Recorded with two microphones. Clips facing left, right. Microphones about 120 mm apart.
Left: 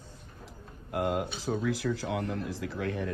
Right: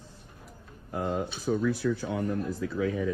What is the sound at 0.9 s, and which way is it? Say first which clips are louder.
Speech: left 1 dB; 75° left (ahead or behind).